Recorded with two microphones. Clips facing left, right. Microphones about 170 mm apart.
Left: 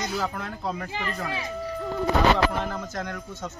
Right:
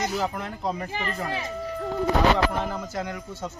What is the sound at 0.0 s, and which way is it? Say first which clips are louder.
Speech: right 2 dB; 15° right (ahead or behind).